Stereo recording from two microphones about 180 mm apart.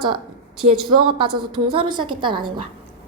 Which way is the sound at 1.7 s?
25° right (ahead or behind).